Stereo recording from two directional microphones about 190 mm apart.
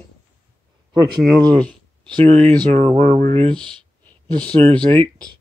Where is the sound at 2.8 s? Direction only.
35° right (ahead or behind).